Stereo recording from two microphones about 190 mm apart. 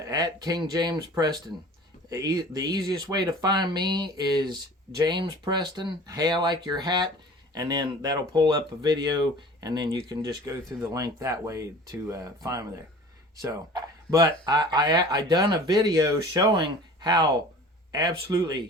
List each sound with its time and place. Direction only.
0.0 s speech: 20° right (ahead or behind)